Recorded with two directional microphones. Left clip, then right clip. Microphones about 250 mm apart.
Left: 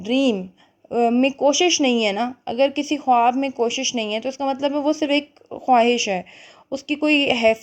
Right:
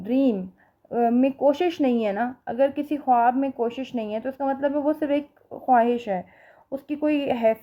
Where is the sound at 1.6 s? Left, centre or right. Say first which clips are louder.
Left 5 dB; centre.